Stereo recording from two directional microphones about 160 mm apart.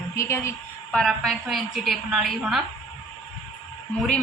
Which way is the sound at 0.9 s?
Centre (ahead or behind).